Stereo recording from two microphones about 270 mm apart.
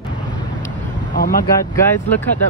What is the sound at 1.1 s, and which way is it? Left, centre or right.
Vehicle, left.